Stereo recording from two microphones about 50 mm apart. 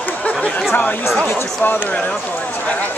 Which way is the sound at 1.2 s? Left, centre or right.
Left.